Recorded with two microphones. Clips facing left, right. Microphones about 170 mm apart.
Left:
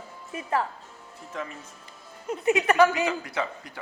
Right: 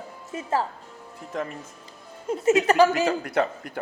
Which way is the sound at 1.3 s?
45° right (ahead or behind).